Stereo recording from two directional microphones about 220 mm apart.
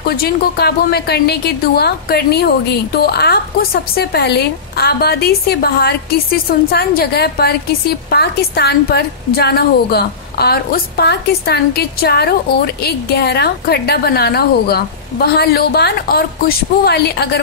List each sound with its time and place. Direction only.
0.0 s a woman's voice: 45° left (ahead or behind)